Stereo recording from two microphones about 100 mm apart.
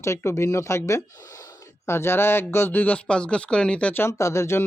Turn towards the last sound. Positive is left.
turn(degrees=25)  # may be behind; listen again after turning